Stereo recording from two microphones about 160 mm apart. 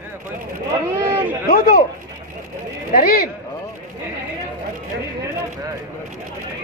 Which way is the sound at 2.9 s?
65° left (ahead or behind).